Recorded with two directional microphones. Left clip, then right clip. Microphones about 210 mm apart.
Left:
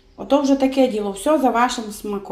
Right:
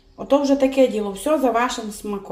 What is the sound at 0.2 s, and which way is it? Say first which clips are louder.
A woman's voice: even; centre (ahead or behind).